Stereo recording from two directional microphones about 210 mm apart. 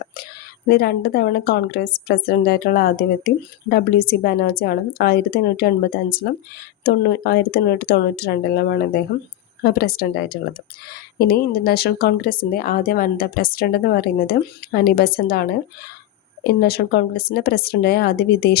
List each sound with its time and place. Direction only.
0.7 s speech: 50° left (ahead or behind)
6.8 s speech: 50° left (ahead or behind)